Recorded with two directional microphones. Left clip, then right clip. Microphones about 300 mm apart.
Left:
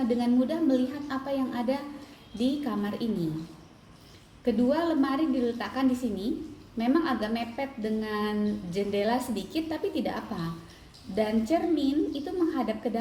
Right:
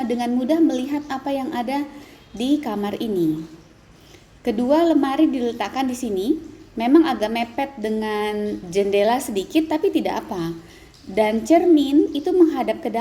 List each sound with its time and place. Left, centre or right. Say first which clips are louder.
0.2 s a woman's voice: right 8 dB; right
4.4 s a woman's voice: right 8 dB; right